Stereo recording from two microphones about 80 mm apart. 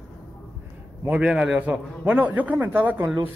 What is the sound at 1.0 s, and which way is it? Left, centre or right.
A man's voice, centre.